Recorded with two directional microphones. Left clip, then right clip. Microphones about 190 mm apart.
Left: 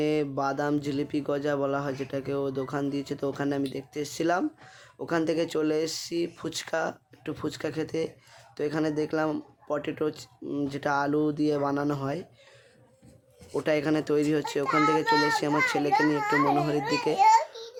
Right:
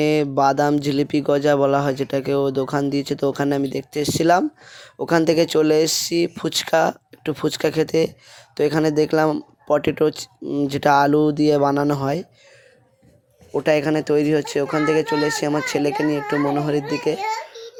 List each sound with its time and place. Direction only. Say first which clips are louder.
0.0 s speech: right 10 dB; 40° right (ahead or behind)
13.5 s speech: right 8 dB; 25° right (ahead or behind)
17.2 s a sound: left 6 dB; 50° left (ahead or behind)